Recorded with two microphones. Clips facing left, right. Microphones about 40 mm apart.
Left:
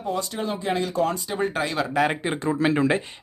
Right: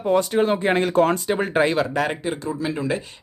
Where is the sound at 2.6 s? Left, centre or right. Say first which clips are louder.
Left 7 dB; left.